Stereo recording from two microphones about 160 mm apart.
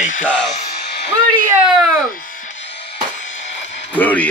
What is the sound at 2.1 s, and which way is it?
Music, 60° left (ahead or behind).